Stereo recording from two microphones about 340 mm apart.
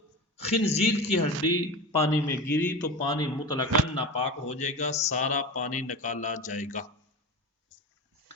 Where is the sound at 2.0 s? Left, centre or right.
Centre.